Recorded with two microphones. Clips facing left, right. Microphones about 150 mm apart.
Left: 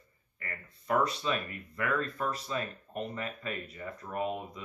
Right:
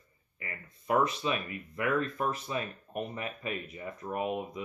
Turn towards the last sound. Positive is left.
turn(degrees=-15)  # may be behind; listen again after turning